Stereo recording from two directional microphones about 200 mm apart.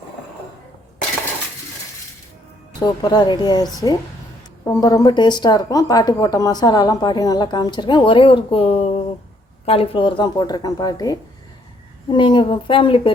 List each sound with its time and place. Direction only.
2.8 s speech: 20° left (ahead or behind)